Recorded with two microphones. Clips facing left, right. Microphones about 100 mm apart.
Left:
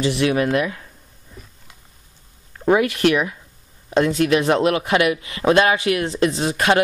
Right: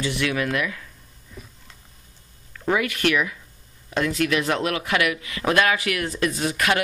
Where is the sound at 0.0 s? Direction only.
30° left (ahead or behind).